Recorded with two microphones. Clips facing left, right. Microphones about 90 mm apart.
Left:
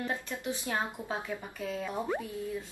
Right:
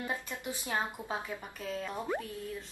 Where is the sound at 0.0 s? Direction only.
15° right (ahead or behind).